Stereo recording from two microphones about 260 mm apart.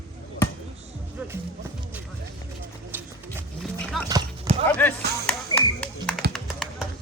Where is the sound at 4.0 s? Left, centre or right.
Centre.